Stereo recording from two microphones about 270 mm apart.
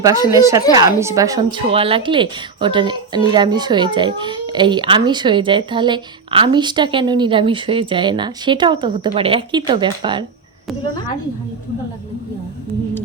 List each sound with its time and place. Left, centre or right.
0.0 s a child's voice: centre